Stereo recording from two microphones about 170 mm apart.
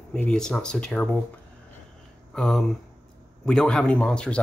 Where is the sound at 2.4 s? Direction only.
5° left (ahead or behind).